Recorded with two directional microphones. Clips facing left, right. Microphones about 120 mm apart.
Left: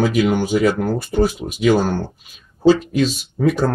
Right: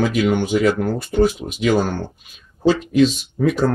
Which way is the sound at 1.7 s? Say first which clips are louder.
Left 2 dB; 5° left (ahead or behind).